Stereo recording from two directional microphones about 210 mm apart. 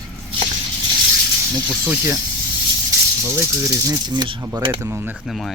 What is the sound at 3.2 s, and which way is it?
Speech, 15° right (ahead or behind).